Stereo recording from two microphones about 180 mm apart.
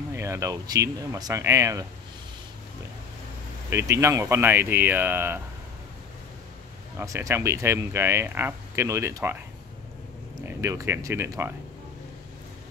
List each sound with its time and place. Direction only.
0.1 s speech: 15° right (ahead or behind)
3.9 s speech: 15° right (ahead or behind)
7.0 s speech: 15° right (ahead or behind)
10.4 s speech: 15° right (ahead or behind)